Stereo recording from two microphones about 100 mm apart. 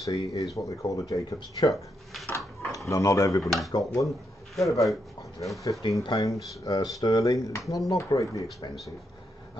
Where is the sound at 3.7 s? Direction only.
40° left (ahead or behind).